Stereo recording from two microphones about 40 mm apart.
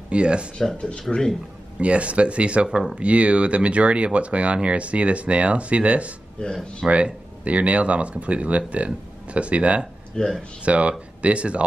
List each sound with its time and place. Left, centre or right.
0.1 s speech: right
0.7 s speech: left
1.8 s speech: right
6.4 s speech: left
7.4 s speech: right
10.2 s speech: left
10.6 s speech: right